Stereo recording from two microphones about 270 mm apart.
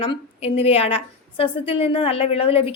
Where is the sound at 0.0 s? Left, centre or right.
Left.